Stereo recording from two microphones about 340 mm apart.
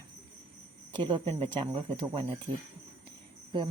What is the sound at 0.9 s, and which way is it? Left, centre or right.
Speech, centre.